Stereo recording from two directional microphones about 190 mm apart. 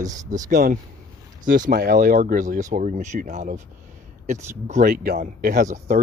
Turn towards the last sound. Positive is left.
turn(degrees=-40)  # may be behind; listen again after turning